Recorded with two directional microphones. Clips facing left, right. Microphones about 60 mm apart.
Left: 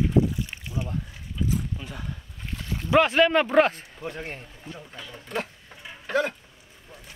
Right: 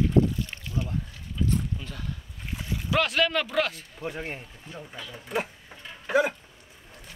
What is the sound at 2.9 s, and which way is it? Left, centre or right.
Speech, left.